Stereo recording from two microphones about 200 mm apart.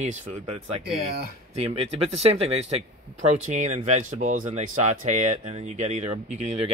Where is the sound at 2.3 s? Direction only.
30° right (ahead or behind).